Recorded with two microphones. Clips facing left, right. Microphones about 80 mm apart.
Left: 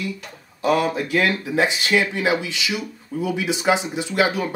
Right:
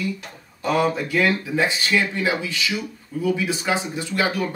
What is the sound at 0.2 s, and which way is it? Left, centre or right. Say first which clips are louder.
Speech: left 4 dB; centre.